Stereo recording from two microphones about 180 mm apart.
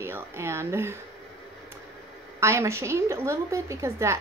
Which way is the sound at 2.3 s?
15° right (ahead or behind).